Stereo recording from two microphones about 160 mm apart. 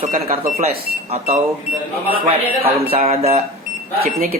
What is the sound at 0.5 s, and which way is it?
Speech, 40° right (ahead or behind).